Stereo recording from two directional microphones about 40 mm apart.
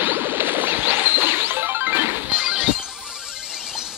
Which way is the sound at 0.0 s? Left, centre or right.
Right.